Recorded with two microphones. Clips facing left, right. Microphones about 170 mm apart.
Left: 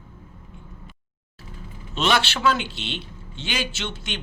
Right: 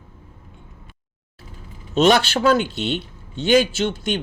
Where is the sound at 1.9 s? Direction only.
45° right (ahead or behind).